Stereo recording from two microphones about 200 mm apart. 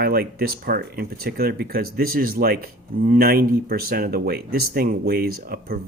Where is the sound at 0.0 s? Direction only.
50° right (ahead or behind).